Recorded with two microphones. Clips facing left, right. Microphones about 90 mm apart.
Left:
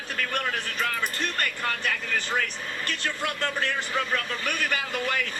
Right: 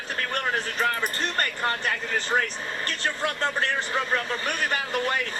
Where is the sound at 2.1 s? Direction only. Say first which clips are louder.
Right 3 dB; 25° right (ahead or behind).